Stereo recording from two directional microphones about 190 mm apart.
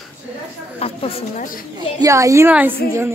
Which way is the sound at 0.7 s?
30° left (ahead or behind).